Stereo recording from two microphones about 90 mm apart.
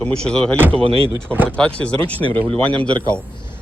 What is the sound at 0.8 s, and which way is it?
Speech, 90° right.